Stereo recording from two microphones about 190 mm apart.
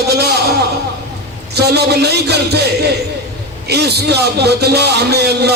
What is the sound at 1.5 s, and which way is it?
A man's voice, 60° right (ahead or behind).